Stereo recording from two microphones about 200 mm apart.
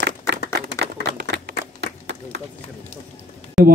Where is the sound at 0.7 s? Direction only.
60° right (ahead or behind).